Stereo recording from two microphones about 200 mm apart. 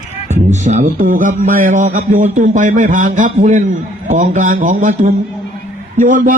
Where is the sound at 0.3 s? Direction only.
35° right (ahead or behind).